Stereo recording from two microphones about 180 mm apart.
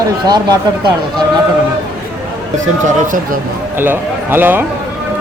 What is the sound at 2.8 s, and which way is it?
Speech, 45° right (ahead or behind).